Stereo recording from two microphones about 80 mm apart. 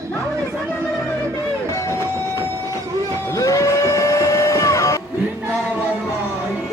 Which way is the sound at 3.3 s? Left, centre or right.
Left.